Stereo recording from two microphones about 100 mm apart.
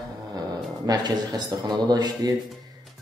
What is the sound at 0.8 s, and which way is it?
Speech, 45° right (ahead or behind).